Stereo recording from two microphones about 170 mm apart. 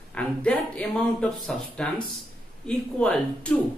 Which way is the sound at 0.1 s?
5° left (ahead or behind).